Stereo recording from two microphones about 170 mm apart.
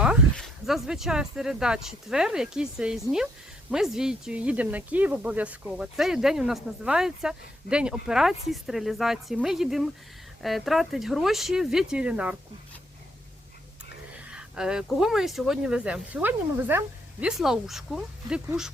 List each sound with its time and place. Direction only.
0.0 s speech: centre (ahead or behind)
14.3 s speech: 5° right (ahead or behind)